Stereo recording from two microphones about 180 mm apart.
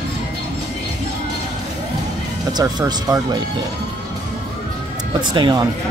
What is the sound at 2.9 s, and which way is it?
Speech, 25° right (ahead or behind).